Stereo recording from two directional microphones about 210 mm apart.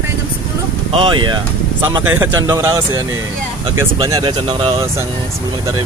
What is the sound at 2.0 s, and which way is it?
Speech, 10° right (ahead or behind).